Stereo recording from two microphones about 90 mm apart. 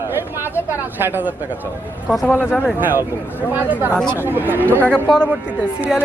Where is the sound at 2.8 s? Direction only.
20° right (ahead or behind).